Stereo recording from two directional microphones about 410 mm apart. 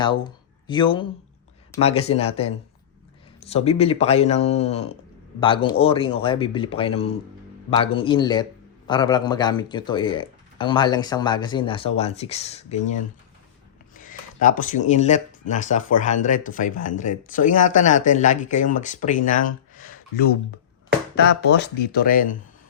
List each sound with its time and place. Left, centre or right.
0.0 s speech: centre
13.9 s speech: centre